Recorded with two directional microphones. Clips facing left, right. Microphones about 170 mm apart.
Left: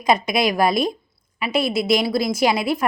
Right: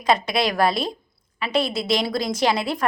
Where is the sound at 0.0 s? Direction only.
15° left (ahead or behind).